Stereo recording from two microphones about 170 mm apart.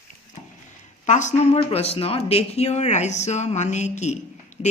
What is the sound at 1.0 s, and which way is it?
Speech, 45° left (ahead or behind).